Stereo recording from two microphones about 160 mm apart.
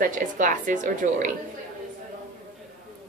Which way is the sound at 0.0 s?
55° right (ahead or behind).